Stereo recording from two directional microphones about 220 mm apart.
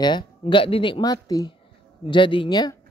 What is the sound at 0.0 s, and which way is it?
Speech, 20° left (ahead or behind).